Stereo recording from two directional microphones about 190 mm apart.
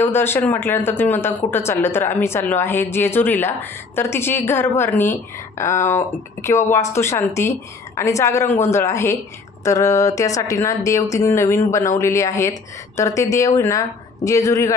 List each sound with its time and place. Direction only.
0.0 s speech: 10° left (ahead or behind)